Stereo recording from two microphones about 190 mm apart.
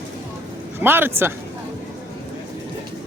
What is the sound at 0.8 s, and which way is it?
Speech, 10° right (ahead or behind).